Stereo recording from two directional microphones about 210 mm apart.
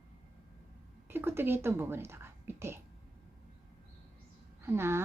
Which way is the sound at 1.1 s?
10° right (ahead or behind).